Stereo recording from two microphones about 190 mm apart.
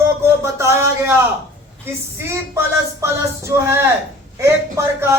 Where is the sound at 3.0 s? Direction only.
15° right (ahead or behind).